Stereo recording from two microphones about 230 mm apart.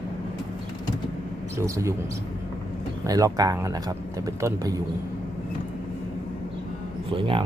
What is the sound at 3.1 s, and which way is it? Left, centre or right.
Speech, centre.